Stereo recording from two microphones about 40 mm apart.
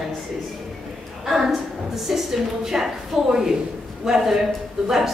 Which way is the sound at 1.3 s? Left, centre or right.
Centre.